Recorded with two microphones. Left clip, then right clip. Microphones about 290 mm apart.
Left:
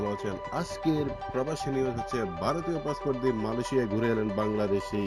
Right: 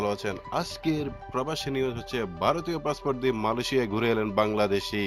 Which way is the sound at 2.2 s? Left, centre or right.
Right.